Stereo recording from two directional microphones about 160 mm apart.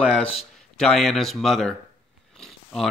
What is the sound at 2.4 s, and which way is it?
Biting, centre (ahead or behind).